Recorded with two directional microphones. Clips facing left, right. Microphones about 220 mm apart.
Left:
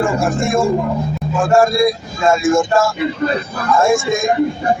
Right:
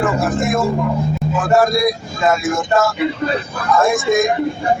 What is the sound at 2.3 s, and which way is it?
Speech, 25° left (ahead or behind).